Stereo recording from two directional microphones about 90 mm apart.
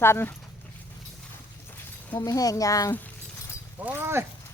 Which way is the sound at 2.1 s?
45° left (ahead or behind).